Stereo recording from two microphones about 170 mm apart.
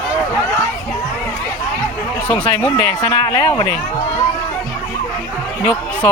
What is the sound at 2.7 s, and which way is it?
Speech, 25° left (ahead or behind).